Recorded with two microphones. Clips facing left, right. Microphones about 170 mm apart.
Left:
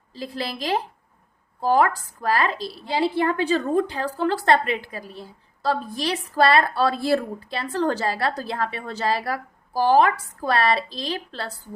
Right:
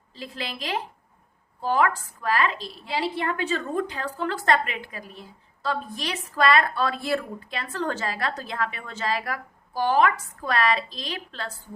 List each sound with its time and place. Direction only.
0.1 s a woman's voice: 35° left (ahead or behind)